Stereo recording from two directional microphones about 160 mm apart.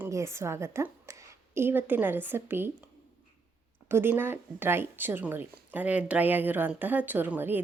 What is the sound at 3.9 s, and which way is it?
Speech, 15° right (ahead or behind).